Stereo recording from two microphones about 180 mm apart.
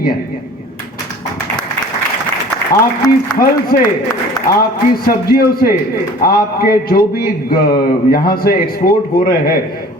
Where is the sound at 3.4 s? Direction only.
55° left (ahead or behind).